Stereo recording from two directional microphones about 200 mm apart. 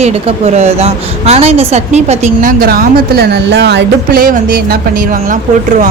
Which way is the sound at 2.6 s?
50° right (ahead or behind).